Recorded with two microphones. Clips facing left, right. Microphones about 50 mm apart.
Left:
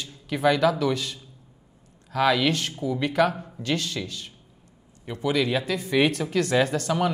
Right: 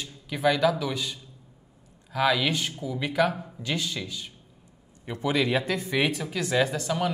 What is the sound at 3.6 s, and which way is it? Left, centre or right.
Speech, centre.